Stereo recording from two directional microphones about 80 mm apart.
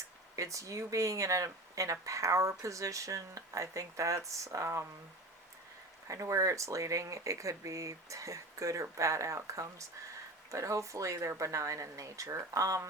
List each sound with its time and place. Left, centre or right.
0.3 s speech: right
6.1 s speech: right